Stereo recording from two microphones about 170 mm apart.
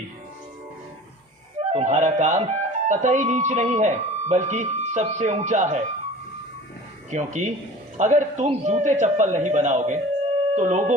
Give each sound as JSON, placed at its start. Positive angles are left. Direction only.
{"t": 1.5, "sound": "speech", "side_deg": -40}
{"t": 7.1, "sound": "a man's voice", "side_deg": -45}